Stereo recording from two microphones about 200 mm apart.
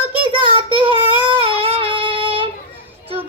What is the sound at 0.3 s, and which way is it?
Child singing, 25° right (ahead or behind).